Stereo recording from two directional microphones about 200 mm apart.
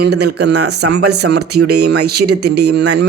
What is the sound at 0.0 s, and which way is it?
Speech, 55° right (ahead or behind).